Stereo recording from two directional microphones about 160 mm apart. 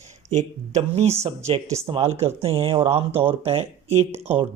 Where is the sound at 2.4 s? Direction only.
35° right (ahead or behind).